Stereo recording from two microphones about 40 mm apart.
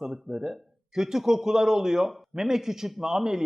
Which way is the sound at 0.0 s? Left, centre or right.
Centre.